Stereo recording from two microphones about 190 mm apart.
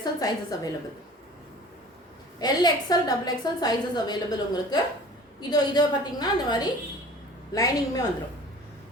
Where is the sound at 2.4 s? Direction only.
20° left (ahead or behind).